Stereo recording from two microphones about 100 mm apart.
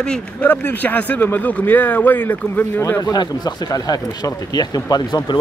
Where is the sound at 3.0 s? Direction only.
40° left (ahead or behind).